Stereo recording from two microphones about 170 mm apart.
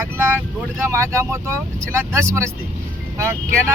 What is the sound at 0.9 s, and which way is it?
Speech, 15° right (ahead or behind).